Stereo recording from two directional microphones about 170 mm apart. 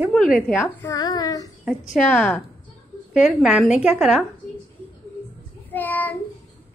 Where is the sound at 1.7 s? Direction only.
5° left (ahead or behind).